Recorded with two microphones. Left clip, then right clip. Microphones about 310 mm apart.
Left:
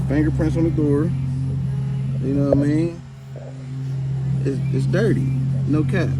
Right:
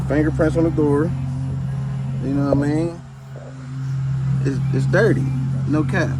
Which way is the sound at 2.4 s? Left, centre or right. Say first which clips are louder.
Left 1 dB; centre.